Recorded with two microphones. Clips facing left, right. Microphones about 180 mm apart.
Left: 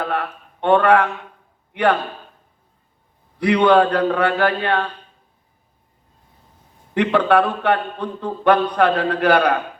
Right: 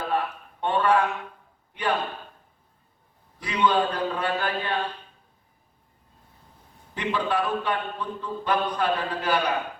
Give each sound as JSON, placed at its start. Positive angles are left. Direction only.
{"t": 0.0, "sound": "a man's voice", "side_deg": 65}
{"t": 3.3, "sound": "a man's voice", "side_deg": 65}
{"t": 6.9, "sound": "a man's voice", "side_deg": 65}